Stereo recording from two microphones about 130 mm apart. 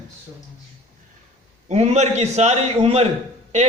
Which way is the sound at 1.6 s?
60° right (ahead or behind).